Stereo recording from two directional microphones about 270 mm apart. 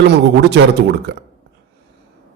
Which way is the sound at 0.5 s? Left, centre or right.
Right.